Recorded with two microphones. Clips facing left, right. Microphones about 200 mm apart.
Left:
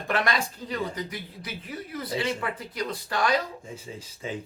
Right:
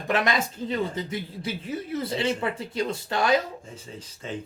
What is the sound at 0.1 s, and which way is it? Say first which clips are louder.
Speech: right 2 dB; 20° right (ahead or behind).